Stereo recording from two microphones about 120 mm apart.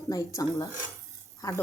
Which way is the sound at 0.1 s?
25° left (ahead or behind).